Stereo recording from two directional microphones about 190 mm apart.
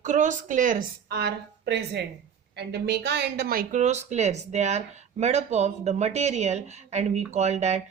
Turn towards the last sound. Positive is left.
turn(degrees=-35)  # may be behind; listen again after turning